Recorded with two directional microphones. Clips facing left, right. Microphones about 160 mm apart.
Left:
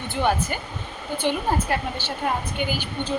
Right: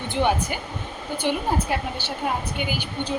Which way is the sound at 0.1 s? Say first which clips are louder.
Right 1 dB; 20° right (ahead or behind).